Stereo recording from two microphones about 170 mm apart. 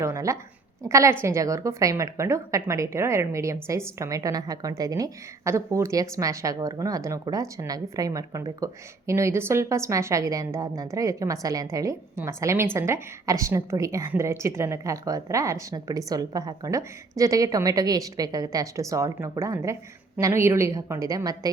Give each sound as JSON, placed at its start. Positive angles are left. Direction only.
{"t": 0.0, "sound": "a woman's voice", "side_deg": -15}